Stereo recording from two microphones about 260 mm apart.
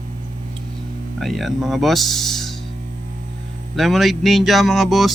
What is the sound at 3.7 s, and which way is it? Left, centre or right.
Speech, centre.